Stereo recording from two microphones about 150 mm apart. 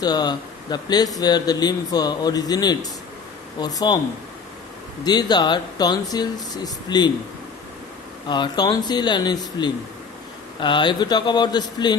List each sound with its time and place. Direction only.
0.0 s speech: 25° left (ahead or behind)
5.0 s speech: 30° left (ahead or behind)
8.3 s speech: 30° left (ahead or behind)